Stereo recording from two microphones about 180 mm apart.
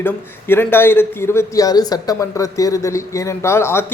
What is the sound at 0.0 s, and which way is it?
A man's voice, 10° left (ahead or behind).